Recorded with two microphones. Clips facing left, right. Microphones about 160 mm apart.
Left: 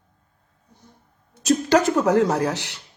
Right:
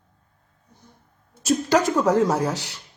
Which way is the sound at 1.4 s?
Centre (ahead or behind).